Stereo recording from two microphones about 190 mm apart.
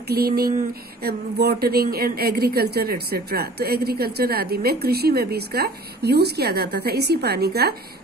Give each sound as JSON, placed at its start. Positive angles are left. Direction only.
{"t": 0.1, "sound": "speech", "side_deg": -55}